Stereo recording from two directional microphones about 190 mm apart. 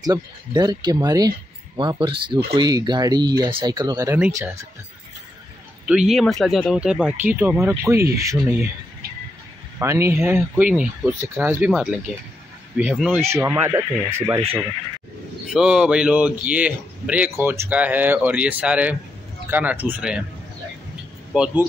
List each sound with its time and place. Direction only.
0.0 s speech: 20° right (ahead or behind)
5.9 s speech: 5° right (ahead or behind)
9.8 s speech: 15° right (ahead or behind)
15.5 s speech: 5° right (ahead or behind)
21.3 s speech: 5° right (ahead or behind)